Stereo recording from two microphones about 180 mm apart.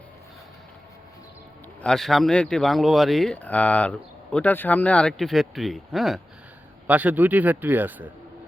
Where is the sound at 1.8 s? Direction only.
Centre (ahead or behind).